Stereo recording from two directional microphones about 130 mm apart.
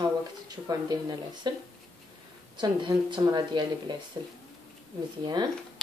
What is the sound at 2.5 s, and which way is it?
Speech, 35° right (ahead or behind).